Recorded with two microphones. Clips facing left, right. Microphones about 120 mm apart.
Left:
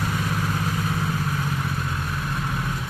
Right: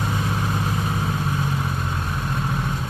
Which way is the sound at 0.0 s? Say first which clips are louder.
Right 1 dB; 20° right (ahead or behind).